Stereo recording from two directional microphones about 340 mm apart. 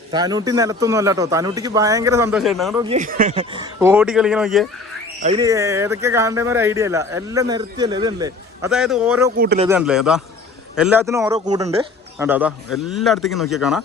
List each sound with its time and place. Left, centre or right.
0.1 s speech: centre
2.9 s speech: right; by 4.7 s centre
5.2 s speech: centre
9.4 s speech: right
9.6 s a man's voice: centre